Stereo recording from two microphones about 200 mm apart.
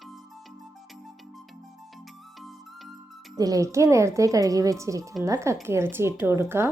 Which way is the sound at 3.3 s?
20° right (ahead or behind).